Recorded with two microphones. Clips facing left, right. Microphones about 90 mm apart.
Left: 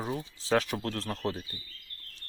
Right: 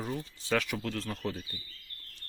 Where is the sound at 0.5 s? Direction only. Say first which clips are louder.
Left 3 dB; 35° left (ahead or behind).